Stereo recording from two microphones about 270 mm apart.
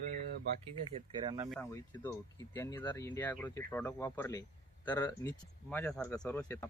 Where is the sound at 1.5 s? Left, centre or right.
Centre.